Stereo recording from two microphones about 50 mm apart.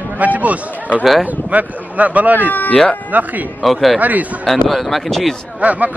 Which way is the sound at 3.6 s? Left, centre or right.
Centre.